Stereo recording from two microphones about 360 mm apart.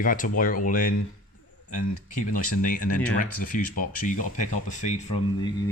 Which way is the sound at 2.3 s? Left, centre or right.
Left.